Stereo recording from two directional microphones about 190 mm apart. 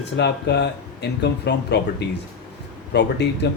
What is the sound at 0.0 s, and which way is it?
Speech, 65° left (ahead or behind).